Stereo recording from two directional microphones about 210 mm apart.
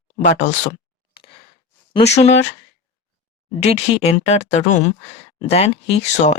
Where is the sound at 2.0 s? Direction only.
30° left (ahead or behind).